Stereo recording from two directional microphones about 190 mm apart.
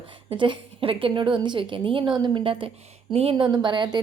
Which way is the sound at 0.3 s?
25° right (ahead or behind).